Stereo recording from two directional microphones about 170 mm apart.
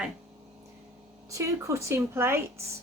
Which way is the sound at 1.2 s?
20° right (ahead or behind).